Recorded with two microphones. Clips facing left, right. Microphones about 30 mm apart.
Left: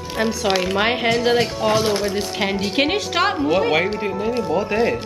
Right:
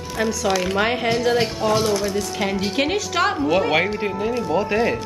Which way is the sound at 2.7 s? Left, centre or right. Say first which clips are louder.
Left 2 dB; left.